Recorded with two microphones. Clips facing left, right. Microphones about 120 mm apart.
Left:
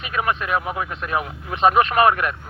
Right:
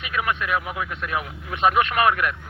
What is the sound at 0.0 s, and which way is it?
A man's voice, 35° left (ahead or behind).